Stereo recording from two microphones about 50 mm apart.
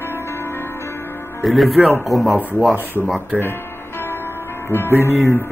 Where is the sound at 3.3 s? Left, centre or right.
Right.